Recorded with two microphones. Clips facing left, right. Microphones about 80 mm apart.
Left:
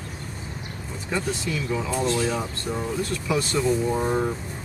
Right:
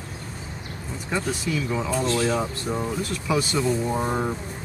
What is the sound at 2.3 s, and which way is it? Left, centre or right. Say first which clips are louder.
Speech: right 3 dB; centre.